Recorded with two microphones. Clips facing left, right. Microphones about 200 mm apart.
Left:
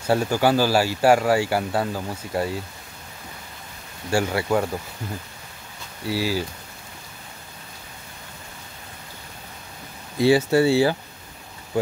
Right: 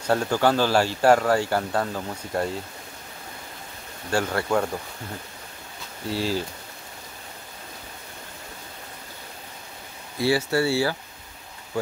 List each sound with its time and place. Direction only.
0.0 s speech: 10° left (ahead or behind)
4.1 s speech: 10° left (ahead or behind)
6.0 s speech: 5° left (ahead or behind)
10.1 s speech: 20° left (ahead or behind)